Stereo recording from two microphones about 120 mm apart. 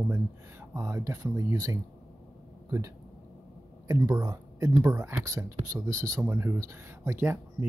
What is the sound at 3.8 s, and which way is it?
Speech, 25° right (ahead or behind).